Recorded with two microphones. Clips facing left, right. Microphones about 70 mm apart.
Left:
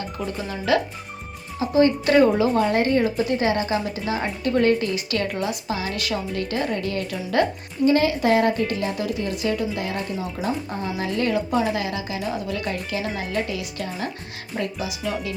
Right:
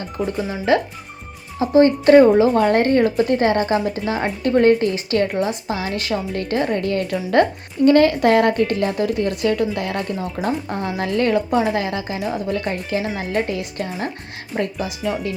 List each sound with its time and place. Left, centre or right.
0.7 s a woman's voice: right
2.6 s a woman's voice: right